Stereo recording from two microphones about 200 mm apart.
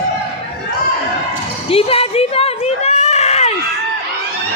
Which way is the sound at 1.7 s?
30° left (ahead or behind).